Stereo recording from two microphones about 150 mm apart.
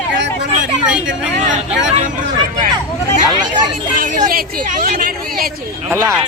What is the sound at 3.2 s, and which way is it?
Speech, 25° right (ahead or behind).